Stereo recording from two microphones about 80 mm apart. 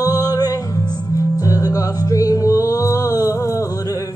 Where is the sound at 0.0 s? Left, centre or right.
Left.